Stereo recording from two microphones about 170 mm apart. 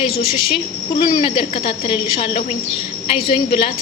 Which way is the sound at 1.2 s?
30° left (ahead or behind).